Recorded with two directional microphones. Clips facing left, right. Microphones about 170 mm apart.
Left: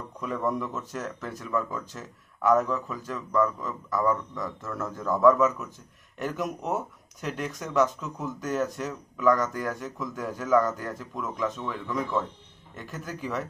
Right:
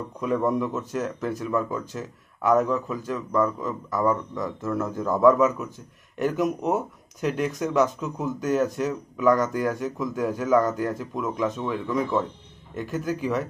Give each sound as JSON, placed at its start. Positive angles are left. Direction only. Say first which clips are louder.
{"t": 0.5, "sound": "speech", "louder": "right 5 dB", "side_deg": -10}